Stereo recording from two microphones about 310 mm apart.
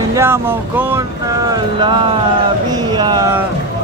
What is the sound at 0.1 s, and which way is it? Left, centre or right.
Speech, centre.